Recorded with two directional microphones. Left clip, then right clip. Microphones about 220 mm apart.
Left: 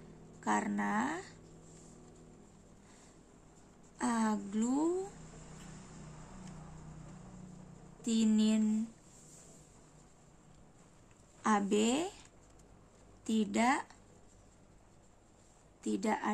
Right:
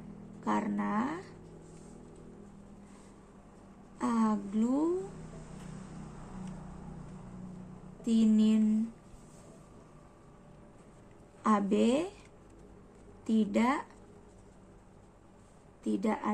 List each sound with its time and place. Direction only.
0.4 s speech: 25° left (ahead or behind)
4.0 s a sound: 30° left (ahead or behind)
8.0 s speech: 25° left (ahead or behind)
11.4 s a woman's voice: 25° left (ahead or behind)
13.2 s speech: 25° left (ahead or behind)
15.8 s speech: 30° left (ahead or behind)